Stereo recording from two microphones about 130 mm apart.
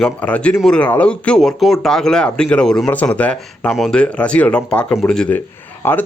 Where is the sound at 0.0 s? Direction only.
10° left (ahead or behind).